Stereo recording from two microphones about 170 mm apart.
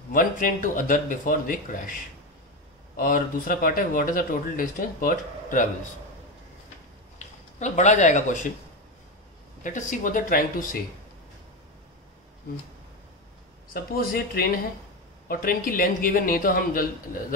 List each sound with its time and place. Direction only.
0.1 s speech: 55° left (ahead or behind)
3.0 s speech: 55° left (ahead or behind)
7.5 s speech: 45° left (ahead or behind)
9.6 s speech: 50° left (ahead or behind)
13.7 s speech: 60° left (ahead or behind)